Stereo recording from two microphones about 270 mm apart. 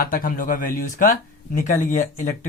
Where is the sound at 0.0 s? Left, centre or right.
Left.